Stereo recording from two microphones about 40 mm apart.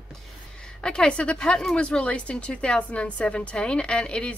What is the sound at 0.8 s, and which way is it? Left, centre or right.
A woman's voice, left.